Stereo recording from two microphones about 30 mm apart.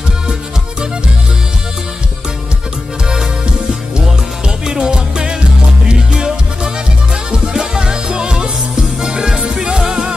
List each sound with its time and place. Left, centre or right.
4.6 s music: right